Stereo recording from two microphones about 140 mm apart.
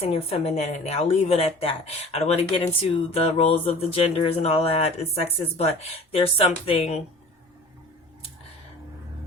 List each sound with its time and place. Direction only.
0.0 s speech: 45° left (ahead or behind)